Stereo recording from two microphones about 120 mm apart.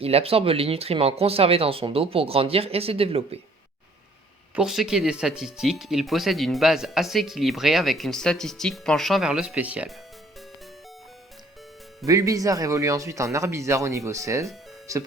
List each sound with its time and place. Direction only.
0.0 s speech: 55° right (ahead or behind)
4.5 s speech: 5° right (ahead or behind)
12.0 s speech: 30° right (ahead or behind)